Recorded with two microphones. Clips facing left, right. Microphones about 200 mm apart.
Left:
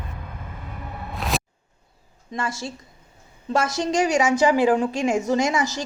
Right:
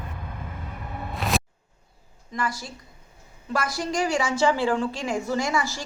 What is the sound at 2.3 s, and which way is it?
A woman's voice, 25° left (ahead or behind).